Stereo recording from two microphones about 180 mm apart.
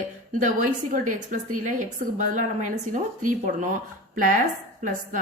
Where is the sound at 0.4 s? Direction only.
45° right (ahead or behind).